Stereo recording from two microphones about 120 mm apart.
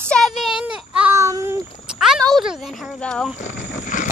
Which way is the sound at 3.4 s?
90° left.